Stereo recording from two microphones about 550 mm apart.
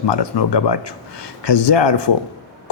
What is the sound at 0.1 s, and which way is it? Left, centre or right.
Speech, left.